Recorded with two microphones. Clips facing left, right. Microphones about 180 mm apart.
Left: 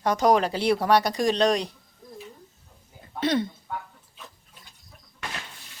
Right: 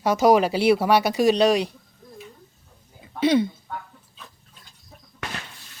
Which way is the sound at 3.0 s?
Centre (ahead or behind).